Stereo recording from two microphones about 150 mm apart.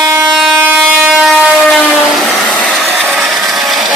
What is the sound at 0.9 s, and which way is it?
Train, centre (ahead or behind).